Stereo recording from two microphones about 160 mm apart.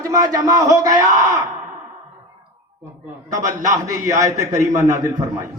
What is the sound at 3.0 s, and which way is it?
Speech, 20° right (ahead or behind).